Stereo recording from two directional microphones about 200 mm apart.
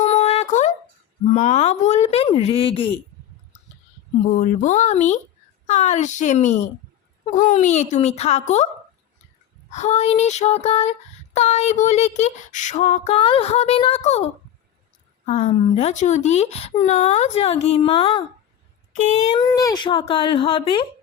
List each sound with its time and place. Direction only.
0.0 s a sound: 35° left (ahead or behind)
1.3 s speech: 35° left (ahead or behind)
4.3 s speech: 40° left (ahead or behind)
9.7 s speech: 35° left (ahead or behind)
15.3 s speech: 35° left (ahead or behind)
19.4 s speech: 20° left (ahead or behind)